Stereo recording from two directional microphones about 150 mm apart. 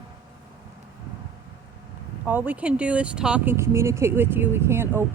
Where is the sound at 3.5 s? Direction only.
20° right (ahead or behind).